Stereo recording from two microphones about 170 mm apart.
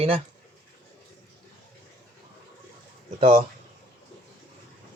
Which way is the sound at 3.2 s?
35° right (ahead or behind).